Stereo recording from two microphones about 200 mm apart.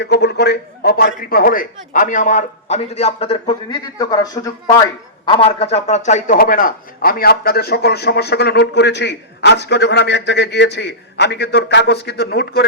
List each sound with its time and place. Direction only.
0.0 s a man's voice: 55° left (ahead or behind)